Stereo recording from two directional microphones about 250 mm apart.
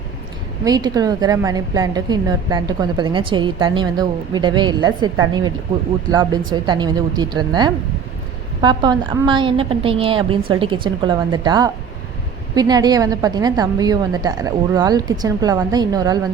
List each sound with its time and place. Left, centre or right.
0.6 s a woman's voice: centre